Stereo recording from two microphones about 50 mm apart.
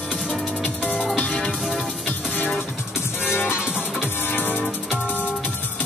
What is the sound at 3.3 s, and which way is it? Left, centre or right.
Music, left.